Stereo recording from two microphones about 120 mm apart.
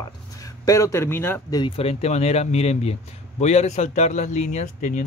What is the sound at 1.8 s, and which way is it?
A man's voice, 55° left (ahead or behind).